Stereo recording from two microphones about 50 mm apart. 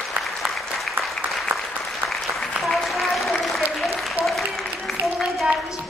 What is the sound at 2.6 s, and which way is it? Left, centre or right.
Applause, centre.